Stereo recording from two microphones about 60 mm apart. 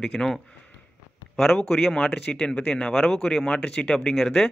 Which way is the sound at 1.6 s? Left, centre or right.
Centre.